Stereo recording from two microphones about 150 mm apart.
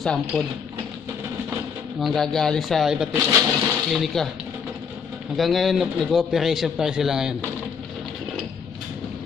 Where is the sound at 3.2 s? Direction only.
15° right (ahead or behind).